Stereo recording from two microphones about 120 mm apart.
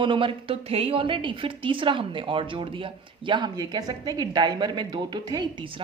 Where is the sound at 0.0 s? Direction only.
45° right (ahead or behind).